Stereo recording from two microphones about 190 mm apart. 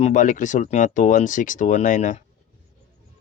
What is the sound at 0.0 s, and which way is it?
Speech, 40° left (ahead or behind).